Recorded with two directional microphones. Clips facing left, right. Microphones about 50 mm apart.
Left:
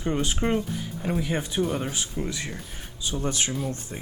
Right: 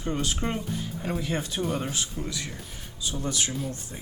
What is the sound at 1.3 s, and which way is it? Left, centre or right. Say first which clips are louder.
Speech: left 3 dB; centre.